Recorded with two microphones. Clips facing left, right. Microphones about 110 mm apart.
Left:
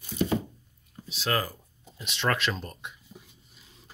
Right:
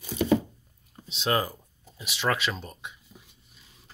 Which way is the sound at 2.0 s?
5° right (ahead or behind).